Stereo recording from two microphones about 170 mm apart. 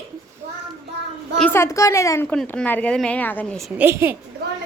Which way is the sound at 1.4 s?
10° left (ahead or behind).